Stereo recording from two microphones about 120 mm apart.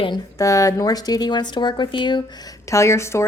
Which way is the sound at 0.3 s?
25° left (ahead or behind).